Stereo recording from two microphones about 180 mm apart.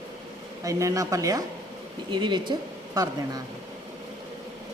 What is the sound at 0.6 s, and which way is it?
A woman's voice, 20° right (ahead or behind).